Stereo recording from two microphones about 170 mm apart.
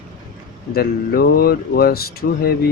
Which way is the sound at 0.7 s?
60° left (ahead or behind).